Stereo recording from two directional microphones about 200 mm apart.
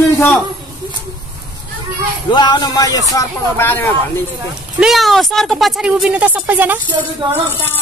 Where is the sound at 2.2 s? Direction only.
20° left (ahead or behind).